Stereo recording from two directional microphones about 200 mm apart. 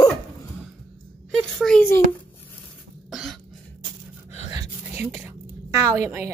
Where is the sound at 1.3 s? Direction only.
Centre (ahead or behind).